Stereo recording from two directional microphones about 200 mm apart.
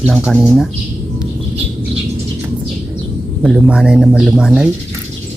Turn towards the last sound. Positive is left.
turn(degrees=-5)  # may be behind; listen again after turning